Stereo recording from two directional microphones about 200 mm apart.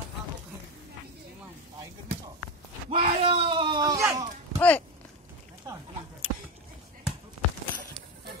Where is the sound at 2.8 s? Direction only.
30° right (ahead or behind).